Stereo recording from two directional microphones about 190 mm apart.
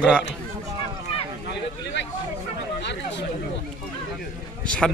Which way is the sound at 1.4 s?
65° left (ahead or behind).